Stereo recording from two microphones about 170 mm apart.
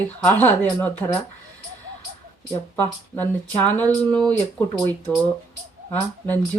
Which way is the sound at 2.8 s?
10° left (ahead or behind).